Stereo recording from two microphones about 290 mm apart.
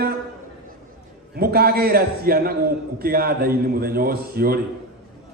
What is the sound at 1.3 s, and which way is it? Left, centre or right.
A man's voice, right.